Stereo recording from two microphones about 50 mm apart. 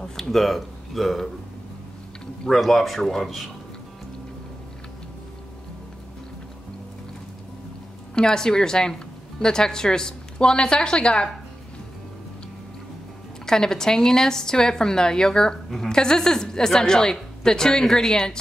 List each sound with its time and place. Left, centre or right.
0.0 s speech: centre
2.4 s speech: centre
8.1 s a woman's voice: centre
13.5 s a woman's voice: centre